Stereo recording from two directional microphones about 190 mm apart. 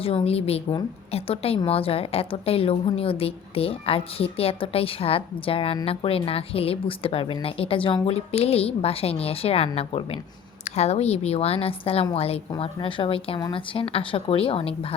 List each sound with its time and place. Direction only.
0.0 s a woman's voice: 30° left (ahead or behind)